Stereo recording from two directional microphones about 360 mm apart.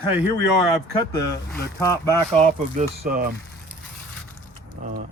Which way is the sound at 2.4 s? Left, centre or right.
Right.